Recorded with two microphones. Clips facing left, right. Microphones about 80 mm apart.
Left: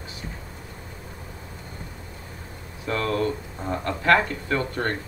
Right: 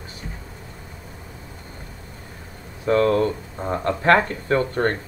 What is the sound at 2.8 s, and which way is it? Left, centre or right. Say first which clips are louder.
Speech: right 7 dB; right.